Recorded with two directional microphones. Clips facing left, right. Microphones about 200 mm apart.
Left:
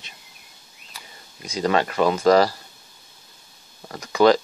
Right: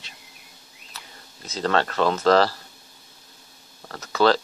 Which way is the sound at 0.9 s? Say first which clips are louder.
Even; 10° left (ahead or behind).